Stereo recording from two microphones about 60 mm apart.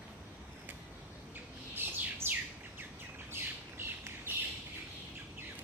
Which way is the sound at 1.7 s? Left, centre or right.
Right.